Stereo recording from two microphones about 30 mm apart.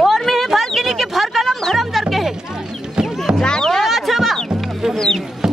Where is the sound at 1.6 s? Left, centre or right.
Centre.